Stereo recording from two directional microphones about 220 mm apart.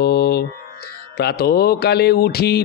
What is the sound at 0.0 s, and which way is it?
Mantra, 45° left (ahead or behind).